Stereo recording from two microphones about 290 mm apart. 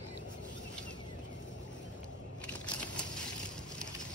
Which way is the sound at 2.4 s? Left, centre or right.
Centre.